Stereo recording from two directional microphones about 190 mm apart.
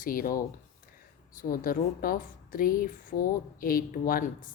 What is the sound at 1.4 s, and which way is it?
A woman's voice, 50° left (ahead or behind).